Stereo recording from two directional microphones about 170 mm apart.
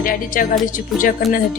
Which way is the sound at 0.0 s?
55° left (ahead or behind).